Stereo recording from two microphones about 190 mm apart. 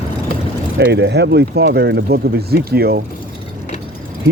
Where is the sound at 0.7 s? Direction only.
65° right (ahead or behind).